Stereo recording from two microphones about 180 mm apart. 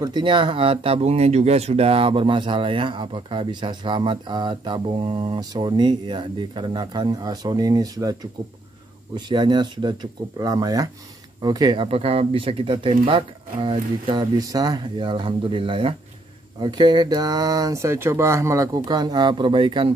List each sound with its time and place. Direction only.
0.0 s speech: 25° right (ahead or behind)